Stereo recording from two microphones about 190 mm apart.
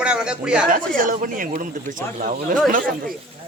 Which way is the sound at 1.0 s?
45° right (ahead or behind).